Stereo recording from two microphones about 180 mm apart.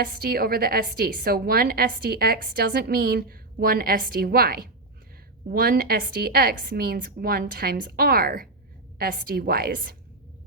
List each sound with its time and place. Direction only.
0.0 s a woman's voice: 55° right (ahead or behind)